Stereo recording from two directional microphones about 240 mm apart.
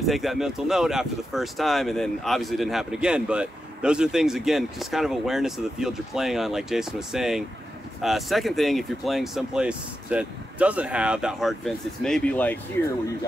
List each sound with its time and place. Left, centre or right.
0.0 s speech: centre